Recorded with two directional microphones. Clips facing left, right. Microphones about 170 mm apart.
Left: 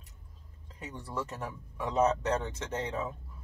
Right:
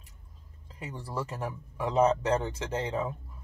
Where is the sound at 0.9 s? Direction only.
30° right (ahead or behind).